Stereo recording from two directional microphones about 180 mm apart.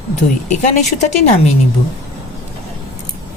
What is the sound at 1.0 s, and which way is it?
Speech, 40° left (ahead or behind).